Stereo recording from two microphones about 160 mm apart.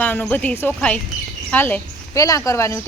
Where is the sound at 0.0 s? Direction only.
10° left (ahead or behind).